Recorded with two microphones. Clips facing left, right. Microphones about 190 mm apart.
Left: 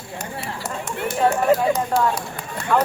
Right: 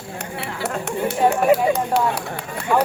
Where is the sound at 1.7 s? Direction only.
65° right (ahead or behind).